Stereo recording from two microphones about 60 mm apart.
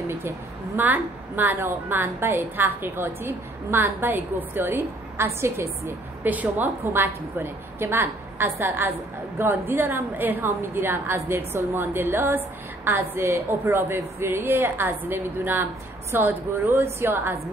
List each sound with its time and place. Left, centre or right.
0.7 s a woman's voice: right
6.2 s a woman's voice: right
6.8 s a woman's voice: right